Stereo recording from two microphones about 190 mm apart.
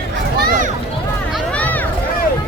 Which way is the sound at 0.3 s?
50° right (ahead or behind).